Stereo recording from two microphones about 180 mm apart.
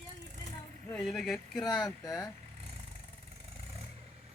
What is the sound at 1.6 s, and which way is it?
Speech, 25° left (ahead or behind).